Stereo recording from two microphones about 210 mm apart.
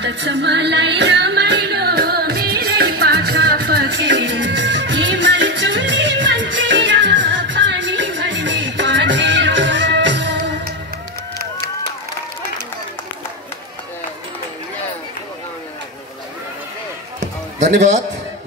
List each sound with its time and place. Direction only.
0.0 s music: 55° right (ahead or behind)